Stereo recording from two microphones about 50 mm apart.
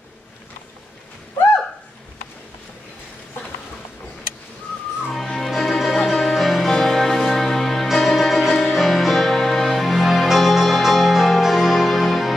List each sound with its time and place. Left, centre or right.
5.0 s music: centre